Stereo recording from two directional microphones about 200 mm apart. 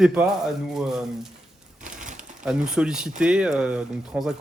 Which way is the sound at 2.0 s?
40° right (ahead or behind).